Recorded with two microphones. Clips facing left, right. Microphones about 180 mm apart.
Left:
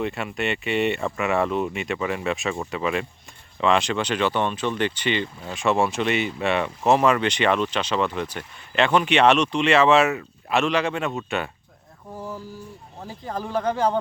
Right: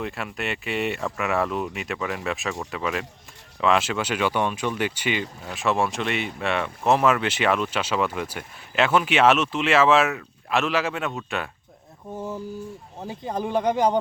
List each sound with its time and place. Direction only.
0.0 s speech: centre (ahead or behind)
13.0 s speech: 20° right (ahead or behind)